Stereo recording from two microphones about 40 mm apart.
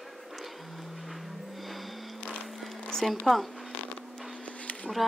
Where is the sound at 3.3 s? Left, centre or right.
Centre.